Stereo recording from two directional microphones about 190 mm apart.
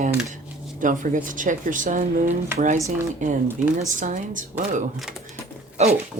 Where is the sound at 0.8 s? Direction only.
45° right (ahead or behind).